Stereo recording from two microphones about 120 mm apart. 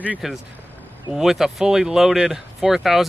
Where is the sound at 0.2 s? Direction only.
Centre (ahead or behind).